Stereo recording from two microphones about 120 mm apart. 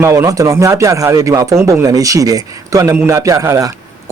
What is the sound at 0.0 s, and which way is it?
Speech, 20° right (ahead or behind).